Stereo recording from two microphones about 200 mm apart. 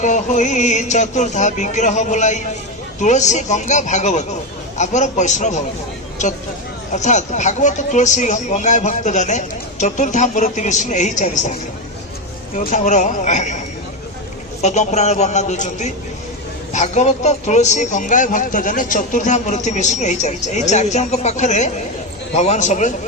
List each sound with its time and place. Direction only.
0.0 s speech: 40° left (ahead or behind)
6.9 s speech: 35° left (ahead or behind)
12.5 s speech: 35° left (ahead or behind)
14.6 s speech: 35° left (ahead or behind)